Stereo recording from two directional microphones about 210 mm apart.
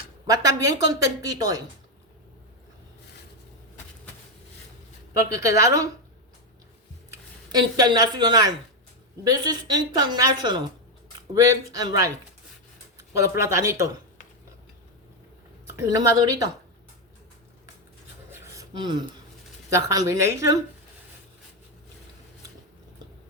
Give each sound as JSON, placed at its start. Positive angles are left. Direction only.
{"t": 0.3, "sound": "speech", "side_deg": -15}
{"t": 5.1, "sound": "speech", "side_deg": -15}
{"t": 7.1, "sound": "a woman's voice", "side_deg": -20}
{"t": 13.1, "sound": "speech", "side_deg": -15}
{"t": 15.7, "sound": "speech", "side_deg": -15}
{"t": 18.3, "sound": "a sound", "side_deg": -15}
{"t": 19.7, "sound": "speech", "side_deg": -15}